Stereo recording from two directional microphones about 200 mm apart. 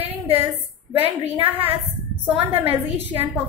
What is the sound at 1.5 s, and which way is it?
A woman's voice, 10° right (ahead or behind).